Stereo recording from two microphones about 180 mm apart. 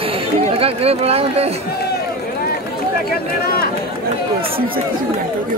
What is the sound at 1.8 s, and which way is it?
Run, 65° left (ahead or behind).